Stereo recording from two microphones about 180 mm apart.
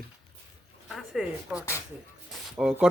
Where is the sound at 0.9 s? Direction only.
Centre (ahead or behind).